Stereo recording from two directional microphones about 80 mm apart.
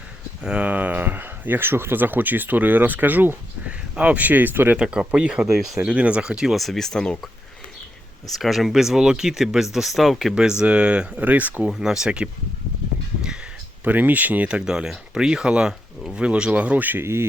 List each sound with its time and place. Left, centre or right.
0.4 s speech: centre
4.8 s speech: centre
8.4 s speech: centre
10.6 s speech: centre
11.7 s speech: centre
13.8 s speech: right